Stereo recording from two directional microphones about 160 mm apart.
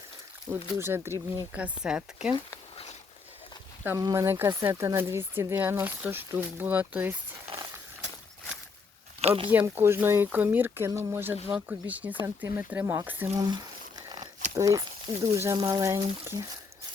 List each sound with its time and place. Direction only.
0.8 s speech: 15° right (ahead or behind)
2.3 s a sound: 30° left (ahead or behind)
3.8 s speech: 20° right (ahead or behind)
9.2 s speech: 40° right (ahead or behind)
9.5 s speech: 10° right (ahead or behind)
13.4 s a sound: 25° right (ahead or behind)
14.5 s speech: 20° right (ahead or behind)